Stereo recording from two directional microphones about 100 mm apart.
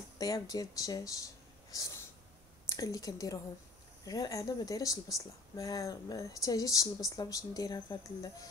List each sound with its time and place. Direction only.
0.2 s speech: 35° left (ahead or behind)